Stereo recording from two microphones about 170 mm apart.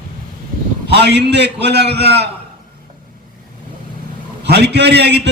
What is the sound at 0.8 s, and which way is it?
A man's voice, 80° right.